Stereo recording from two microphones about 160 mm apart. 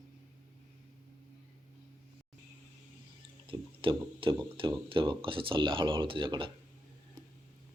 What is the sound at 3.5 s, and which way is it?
Speech, 35° right (ahead or behind).